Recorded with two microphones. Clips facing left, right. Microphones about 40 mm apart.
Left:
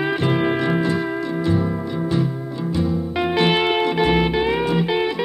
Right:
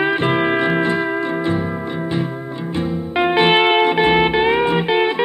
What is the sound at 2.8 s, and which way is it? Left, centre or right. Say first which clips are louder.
Music: right 3 dB; right.